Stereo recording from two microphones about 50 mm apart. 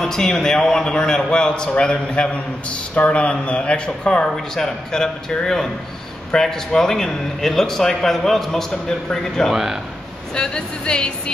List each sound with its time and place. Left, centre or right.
0.0 s a man's voice: centre
9.5 s a man's voice: centre
10.3 s a man's voice: centre